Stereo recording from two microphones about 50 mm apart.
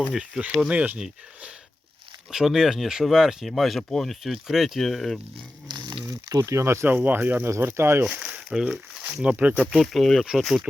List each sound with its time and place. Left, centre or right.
0.1 s speech: centre
2.3 s speech: centre
4.2 s speech: centre
4.8 s speech: centre
6.4 s speech: right
6.8 s speech: right
7.6 s speech: right
8.5 s speech: centre
9.3 s speech: right
9.7 s speech: centre